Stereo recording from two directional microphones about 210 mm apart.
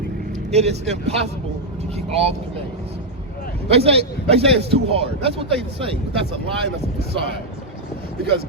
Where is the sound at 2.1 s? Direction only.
30° right (ahead or behind).